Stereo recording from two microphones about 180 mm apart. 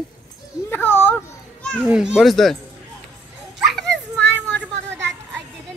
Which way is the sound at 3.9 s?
75° right (ahead or behind).